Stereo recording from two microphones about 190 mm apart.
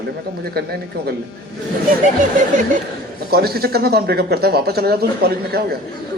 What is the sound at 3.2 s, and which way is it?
A man's voice, 55° right (ahead or behind).